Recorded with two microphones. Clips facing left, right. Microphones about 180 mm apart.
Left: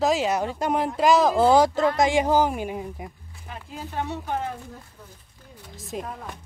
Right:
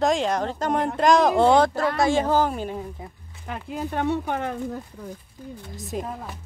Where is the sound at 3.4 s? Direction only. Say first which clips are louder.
Right 7 dB; 65° right (ahead or behind).